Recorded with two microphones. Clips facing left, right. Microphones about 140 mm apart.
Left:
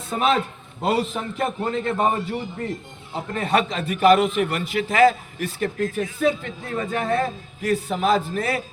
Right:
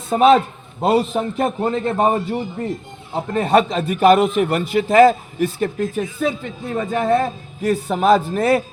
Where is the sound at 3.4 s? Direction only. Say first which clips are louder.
Right 6 dB; 45° right (ahead or behind).